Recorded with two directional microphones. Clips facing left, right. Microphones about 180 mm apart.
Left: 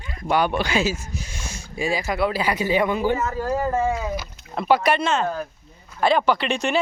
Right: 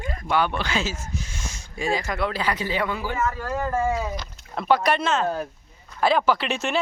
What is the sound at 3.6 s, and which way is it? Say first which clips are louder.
Speech: left 1 dB; 20° left (ahead or behind).